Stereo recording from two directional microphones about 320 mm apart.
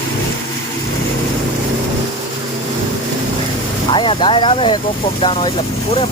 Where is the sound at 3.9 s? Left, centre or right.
Centre.